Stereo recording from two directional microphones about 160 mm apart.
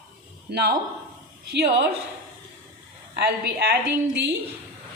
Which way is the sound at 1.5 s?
90° right.